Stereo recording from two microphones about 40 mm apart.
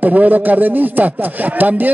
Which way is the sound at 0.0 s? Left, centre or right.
Right.